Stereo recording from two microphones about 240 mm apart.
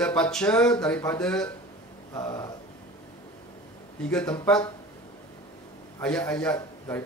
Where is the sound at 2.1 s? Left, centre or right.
Centre.